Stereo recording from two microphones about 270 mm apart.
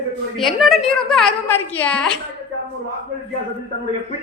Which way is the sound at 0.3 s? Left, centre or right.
Centre.